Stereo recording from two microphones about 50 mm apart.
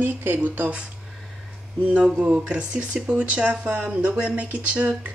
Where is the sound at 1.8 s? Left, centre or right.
Right.